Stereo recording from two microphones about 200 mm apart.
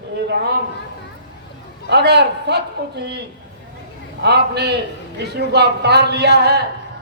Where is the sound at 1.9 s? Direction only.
55° right (ahead or behind).